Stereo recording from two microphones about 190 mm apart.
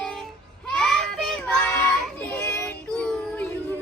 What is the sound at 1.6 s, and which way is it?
Child singing, 15° left (ahead or behind).